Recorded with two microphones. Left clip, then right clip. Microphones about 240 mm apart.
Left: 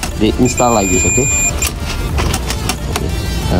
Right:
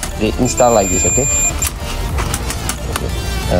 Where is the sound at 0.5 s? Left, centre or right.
Right.